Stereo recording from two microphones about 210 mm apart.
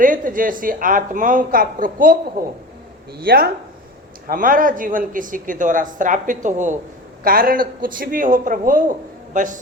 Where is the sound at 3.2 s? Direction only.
45° right (ahead or behind).